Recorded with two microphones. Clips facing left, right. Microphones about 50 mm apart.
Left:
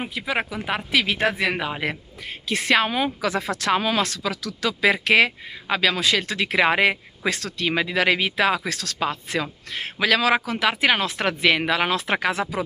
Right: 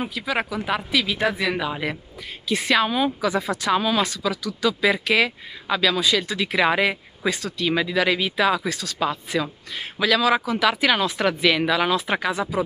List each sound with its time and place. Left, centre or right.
0.1 s speech: left
0.9 s speech: left
5.9 s speech: left
7.2 s speech: left
7.6 s speech: left
10.6 s speech: left
11.9 s speech: left